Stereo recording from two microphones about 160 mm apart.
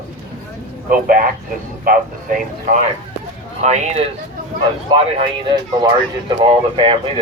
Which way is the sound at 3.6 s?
45° right (ahead or behind).